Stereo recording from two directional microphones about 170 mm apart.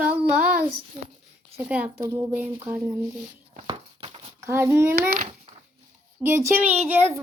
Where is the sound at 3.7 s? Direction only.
35° right (ahead or behind).